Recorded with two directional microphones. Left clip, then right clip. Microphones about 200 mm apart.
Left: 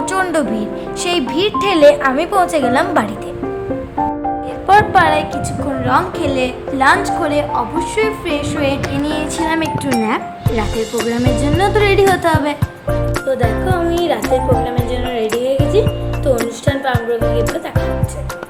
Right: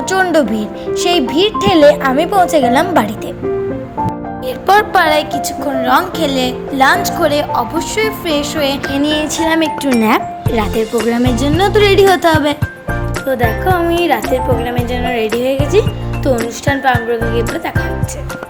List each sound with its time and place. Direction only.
0.1 s a woman's voice: 20° right (ahead or behind)
4.6 s a woman's voice: 25° right (ahead or behind)
15.7 s music: 25° right (ahead or behind)
16.6 s a woman's voice: 25° right (ahead or behind)